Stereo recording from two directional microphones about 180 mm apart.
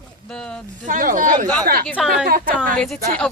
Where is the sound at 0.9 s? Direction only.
50° right (ahead or behind).